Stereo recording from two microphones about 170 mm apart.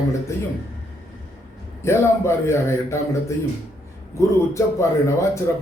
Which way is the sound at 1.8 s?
15° left (ahead or behind).